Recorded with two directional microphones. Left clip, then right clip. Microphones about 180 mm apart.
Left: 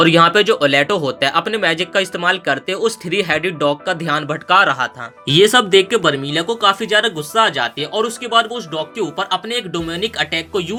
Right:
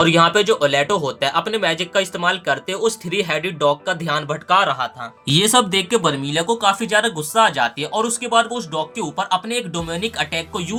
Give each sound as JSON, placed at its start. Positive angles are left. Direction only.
{"t": 0.0, "sound": "speech", "side_deg": 15}